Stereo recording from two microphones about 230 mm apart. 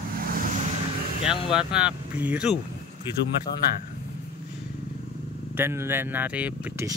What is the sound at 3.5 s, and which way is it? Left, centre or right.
Speech, left.